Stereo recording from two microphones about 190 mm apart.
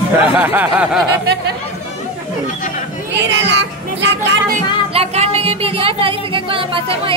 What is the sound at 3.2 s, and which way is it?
Speech, 65° right (ahead or behind).